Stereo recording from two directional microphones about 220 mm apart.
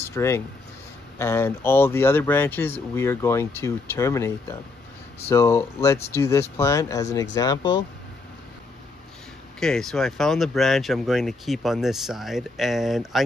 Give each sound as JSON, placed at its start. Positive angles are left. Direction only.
{"t": 0.0, "sound": "speech", "side_deg": 10}
{"t": 9.6, "sound": "speech", "side_deg": 0}